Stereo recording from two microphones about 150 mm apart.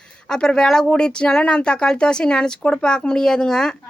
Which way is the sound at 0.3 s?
5° left (ahead or behind).